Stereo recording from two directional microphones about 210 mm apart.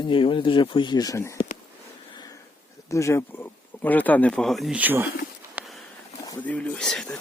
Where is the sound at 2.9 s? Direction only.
15° left (ahead or behind); by 5.0 s 10° right (ahead or behind).